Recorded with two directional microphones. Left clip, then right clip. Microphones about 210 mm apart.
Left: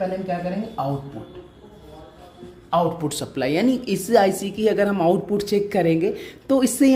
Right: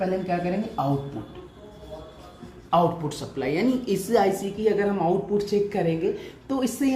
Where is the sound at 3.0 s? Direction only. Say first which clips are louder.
Left 4 dB; 45° left (ahead or behind).